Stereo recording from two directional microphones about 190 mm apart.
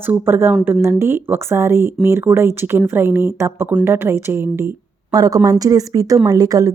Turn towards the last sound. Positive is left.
turn(degrees=-20)  # may be behind; listen again after turning